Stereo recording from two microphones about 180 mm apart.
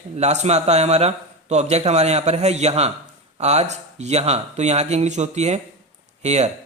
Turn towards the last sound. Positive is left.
turn(degrees=-40)  # may be behind; listen again after turning